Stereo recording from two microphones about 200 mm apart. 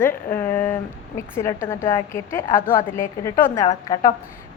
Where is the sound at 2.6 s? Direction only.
45° left (ahead or behind).